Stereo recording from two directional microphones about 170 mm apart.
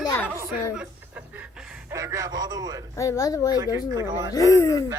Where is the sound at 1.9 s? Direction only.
15° right (ahead or behind).